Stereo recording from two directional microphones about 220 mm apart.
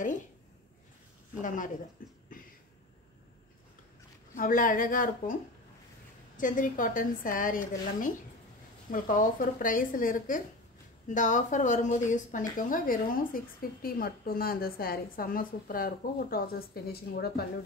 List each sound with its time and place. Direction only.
2.0 s a woman's voice: 40° left (ahead or behind)
4.4 s a woman's voice: 40° left (ahead or behind)